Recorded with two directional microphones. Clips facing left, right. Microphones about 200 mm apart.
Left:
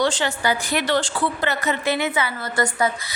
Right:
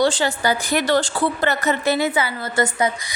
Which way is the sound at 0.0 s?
35° right (ahead or behind).